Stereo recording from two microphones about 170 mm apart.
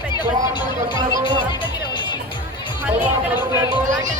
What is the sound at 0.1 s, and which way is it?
Speech, 25° left (ahead or behind).